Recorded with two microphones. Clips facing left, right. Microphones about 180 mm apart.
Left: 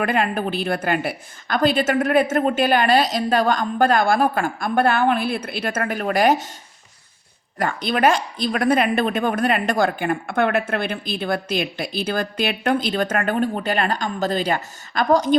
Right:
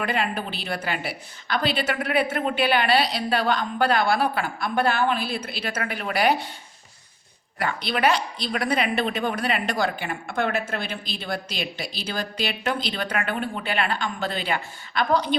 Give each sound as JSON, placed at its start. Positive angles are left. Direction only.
{"t": 0.0, "sound": "a woman's voice", "side_deg": 50}
{"t": 7.6, "sound": "a woman's voice", "side_deg": 45}